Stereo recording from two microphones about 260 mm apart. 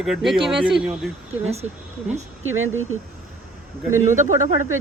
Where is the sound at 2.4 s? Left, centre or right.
Right.